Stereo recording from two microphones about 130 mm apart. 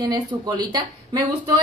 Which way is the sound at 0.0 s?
30° right (ahead or behind).